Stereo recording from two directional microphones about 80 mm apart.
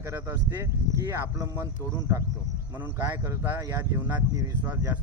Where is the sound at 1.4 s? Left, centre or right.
Right.